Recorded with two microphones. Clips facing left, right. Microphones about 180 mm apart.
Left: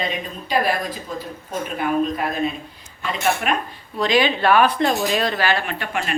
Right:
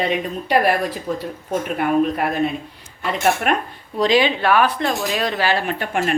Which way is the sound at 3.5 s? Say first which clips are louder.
Right 3 dB; 55° right (ahead or behind).